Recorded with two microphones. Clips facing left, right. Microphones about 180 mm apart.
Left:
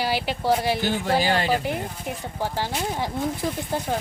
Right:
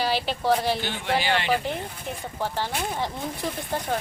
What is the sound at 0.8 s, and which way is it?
Speech, 40° left (ahead or behind).